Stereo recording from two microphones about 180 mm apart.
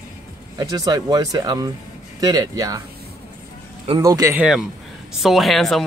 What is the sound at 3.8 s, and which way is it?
Speech, 20° right (ahead or behind).